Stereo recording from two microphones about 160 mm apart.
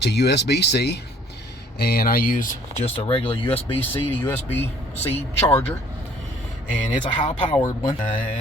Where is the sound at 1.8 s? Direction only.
75° left (ahead or behind).